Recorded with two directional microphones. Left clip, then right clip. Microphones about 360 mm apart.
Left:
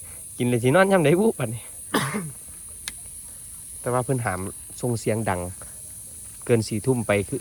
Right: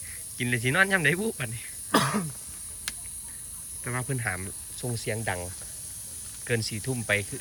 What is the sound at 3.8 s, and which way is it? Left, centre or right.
Speech, left.